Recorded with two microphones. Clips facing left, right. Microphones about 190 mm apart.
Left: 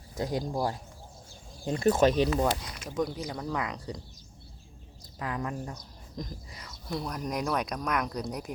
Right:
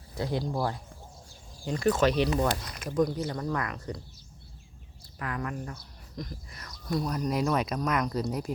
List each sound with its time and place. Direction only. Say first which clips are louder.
0.3 s speech: right 1 dB; 15° left (ahead or behind)
2.9 s speech: right 4 dB; 10° left (ahead or behind)
5.2 s speech: left 1 dB; 20° left (ahead or behind)
6.8 s speech: right 4 dB; centre (ahead or behind)